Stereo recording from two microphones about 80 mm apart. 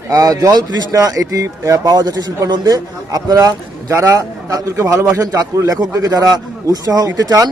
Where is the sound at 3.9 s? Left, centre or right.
Right.